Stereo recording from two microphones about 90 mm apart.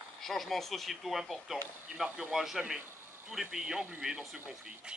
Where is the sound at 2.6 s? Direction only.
15° right (ahead or behind).